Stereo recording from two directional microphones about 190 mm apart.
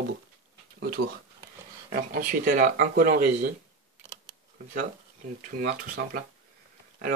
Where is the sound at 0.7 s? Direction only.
55° right (ahead or behind).